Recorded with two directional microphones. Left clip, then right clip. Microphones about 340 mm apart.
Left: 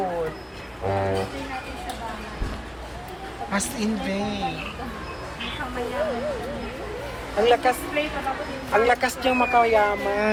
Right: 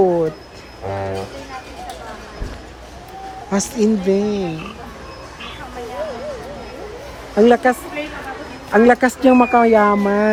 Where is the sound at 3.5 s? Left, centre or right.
Right.